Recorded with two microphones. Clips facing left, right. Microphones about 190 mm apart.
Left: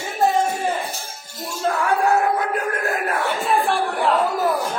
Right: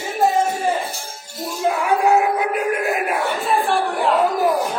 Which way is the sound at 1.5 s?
15° right (ahead or behind).